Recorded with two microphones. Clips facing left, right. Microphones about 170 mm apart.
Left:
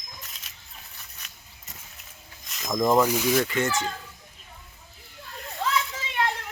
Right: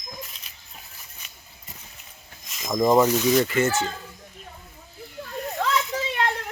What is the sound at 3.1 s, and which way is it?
Speech, 5° left (ahead or behind).